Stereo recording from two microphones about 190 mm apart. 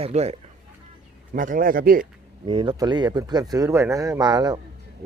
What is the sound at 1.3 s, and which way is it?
Speech, 45° right (ahead or behind).